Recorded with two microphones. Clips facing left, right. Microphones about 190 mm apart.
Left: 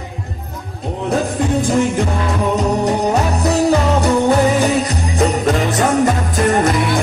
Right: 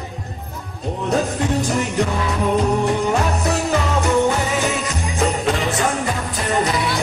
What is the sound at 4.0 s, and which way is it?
Jingle bell, 35° left (ahead or behind).